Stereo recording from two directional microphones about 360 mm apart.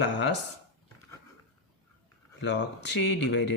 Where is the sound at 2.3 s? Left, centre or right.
Left.